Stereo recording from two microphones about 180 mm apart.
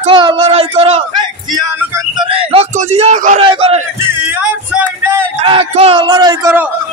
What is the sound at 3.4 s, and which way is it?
Speech, 30° right (ahead or behind).